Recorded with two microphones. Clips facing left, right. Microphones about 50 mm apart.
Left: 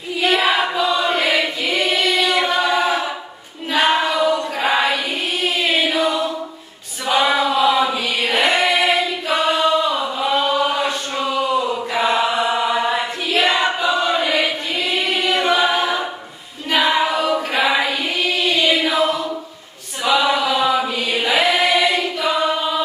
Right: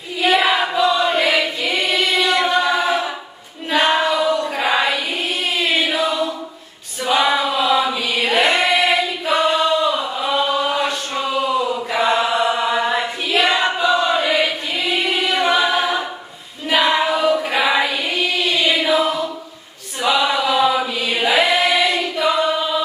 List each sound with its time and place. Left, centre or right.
0.2 s choir: centre
3.7 s a sound: centre
7.1 s choir: centre